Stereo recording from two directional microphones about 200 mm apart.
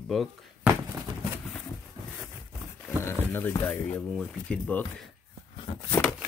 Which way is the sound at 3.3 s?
10° left (ahead or behind).